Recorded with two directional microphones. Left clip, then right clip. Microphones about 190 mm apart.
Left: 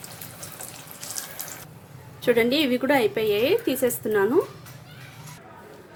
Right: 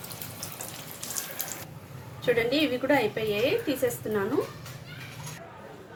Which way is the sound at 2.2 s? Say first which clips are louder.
Left 4 dB; 55° left (ahead or behind).